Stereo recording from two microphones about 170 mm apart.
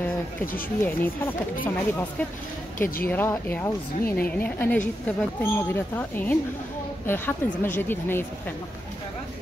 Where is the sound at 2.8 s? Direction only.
60° left (ahead or behind).